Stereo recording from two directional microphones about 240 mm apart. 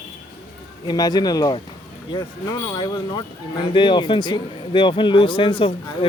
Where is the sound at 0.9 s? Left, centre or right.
Centre.